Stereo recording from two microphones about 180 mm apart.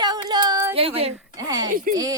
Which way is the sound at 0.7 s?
30° right (ahead or behind).